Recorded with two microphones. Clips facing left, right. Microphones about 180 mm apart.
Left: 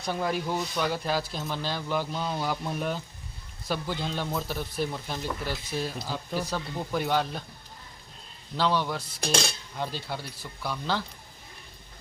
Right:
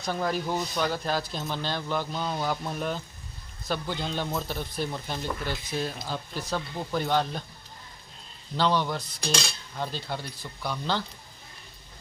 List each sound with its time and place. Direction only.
0.0 s speech: 10° left (ahead or behind)
8.5 s speech: 5° left (ahead or behind)
9.2 s cutlery: 55° left (ahead or behind)
9.7 s speech: 10° left (ahead or behind)